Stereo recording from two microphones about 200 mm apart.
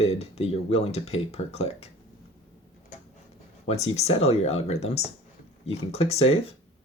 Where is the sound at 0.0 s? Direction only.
30° left (ahead or behind).